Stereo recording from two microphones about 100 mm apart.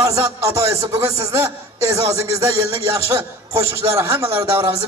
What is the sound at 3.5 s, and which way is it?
Music, 25° right (ahead or behind).